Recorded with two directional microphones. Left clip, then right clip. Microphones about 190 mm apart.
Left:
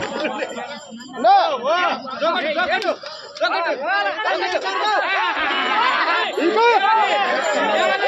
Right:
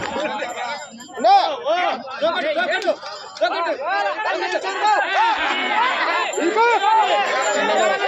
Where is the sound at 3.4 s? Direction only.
40° left (ahead or behind).